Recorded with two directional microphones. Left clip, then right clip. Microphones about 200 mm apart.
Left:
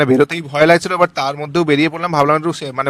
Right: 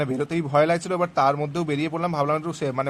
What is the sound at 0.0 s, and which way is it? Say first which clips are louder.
A man's voice: left 12 dB; 45° left (ahead or behind).